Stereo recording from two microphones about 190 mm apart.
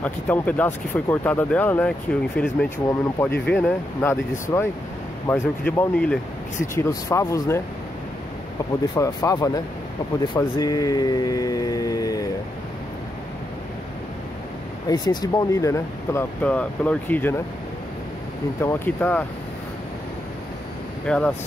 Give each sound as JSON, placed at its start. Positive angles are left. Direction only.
{"t": 0.0, "sound": "speech", "side_deg": 10}
{"t": 8.9, "sound": "speech", "side_deg": 20}
{"t": 14.9, "sound": "speech", "side_deg": 20}
{"t": 18.6, "sound": "speech", "side_deg": 10}
{"t": 21.1, "sound": "speech", "side_deg": 5}